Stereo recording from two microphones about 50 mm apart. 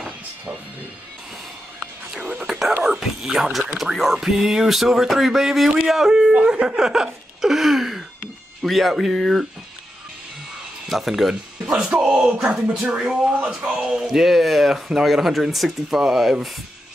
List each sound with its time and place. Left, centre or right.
2.5 s music: centre
3.6 s speech: centre
10.9 s speech: centre